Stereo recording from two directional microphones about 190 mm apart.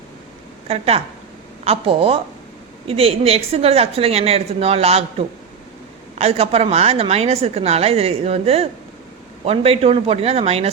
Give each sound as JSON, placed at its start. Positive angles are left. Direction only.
{"t": 0.7, "sound": "a woman's voice", "side_deg": -30}